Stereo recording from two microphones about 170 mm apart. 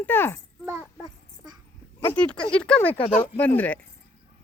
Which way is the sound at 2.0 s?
10° left (ahead or behind).